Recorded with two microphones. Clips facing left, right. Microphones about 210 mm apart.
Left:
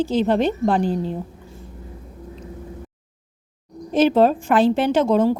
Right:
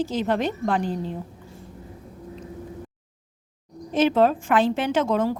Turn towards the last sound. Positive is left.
turn(degrees=30)  # may be behind; listen again after turning